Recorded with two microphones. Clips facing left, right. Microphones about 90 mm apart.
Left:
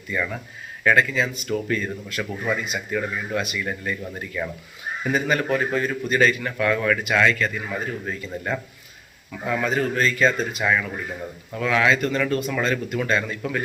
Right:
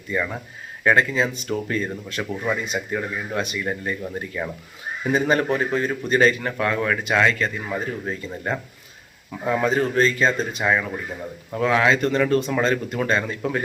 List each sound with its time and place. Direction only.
0.1 s a man's voice: 20° right (ahead or behind)